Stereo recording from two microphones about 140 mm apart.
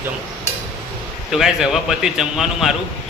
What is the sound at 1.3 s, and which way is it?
A man's voice, centre (ahead or behind).